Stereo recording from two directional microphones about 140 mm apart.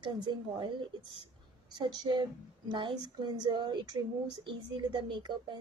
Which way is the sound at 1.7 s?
35° right (ahead or behind).